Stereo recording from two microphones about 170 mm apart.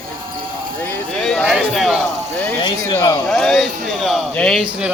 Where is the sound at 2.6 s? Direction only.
25° left (ahead or behind).